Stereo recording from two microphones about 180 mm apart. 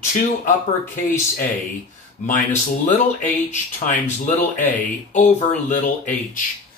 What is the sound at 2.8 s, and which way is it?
Speech, 45° left (ahead or behind).